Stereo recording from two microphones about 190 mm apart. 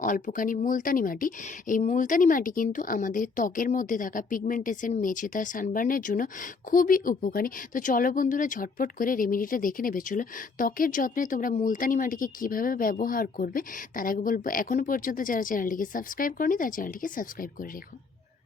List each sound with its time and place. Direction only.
0.0 s speech: 45° left (ahead or behind)